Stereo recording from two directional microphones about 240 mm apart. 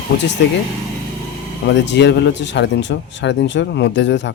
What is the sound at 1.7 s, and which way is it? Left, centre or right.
Speech, left.